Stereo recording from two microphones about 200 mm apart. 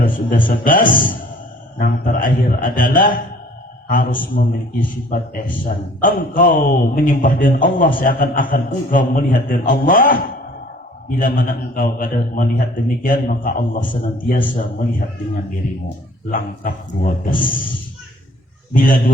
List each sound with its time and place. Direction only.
0.0 s a man's voice: 45° left (ahead or behind)
16.3 s a man's voice: 45° left (ahead or behind)
18.7 s a man's voice: 45° left (ahead or behind)